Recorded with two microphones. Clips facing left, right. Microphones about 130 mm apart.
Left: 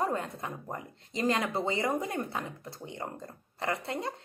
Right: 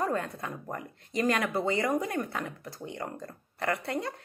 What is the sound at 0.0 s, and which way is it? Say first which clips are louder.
Speech: right 1 dB; 20° left (ahead or behind).